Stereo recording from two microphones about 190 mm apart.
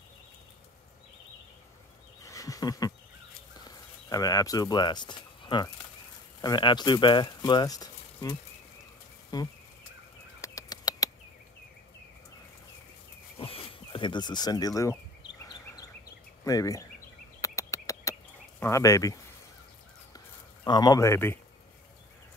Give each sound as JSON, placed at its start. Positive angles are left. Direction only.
{"t": 2.2, "sound": "a sound", "side_deg": 15}
{"t": 3.5, "sound": "speech", "side_deg": 20}
{"t": 9.3, "sound": "insect", "side_deg": 20}
{"t": 10.4, "sound": "bird", "side_deg": 20}
{"t": 13.4, "sound": "a sound", "side_deg": 30}
{"t": 16.4, "sound": "a man's voice", "side_deg": 15}
{"t": 17.4, "sound": "a sound", "side_deg": 15}
{"t": 18.6, "sound": "a man's voice", "side_deg": 15}
{"t": 20.6, "sound": "a man's voice", "side_deg": 20}